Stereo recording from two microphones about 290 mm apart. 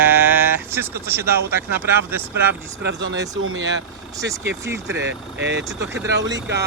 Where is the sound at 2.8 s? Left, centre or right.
Right.